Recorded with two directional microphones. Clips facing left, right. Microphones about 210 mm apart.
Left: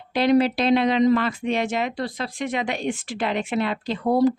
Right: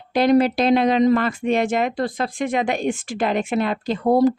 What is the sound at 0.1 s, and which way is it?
Speech, 45° right (ahead or behind).